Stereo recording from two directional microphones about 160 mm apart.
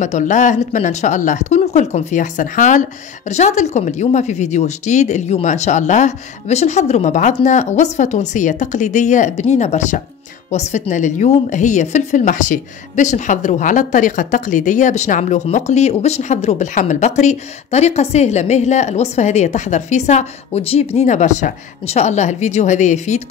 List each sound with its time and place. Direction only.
0.0 s a woman's voice: 50° left (ahead or behind)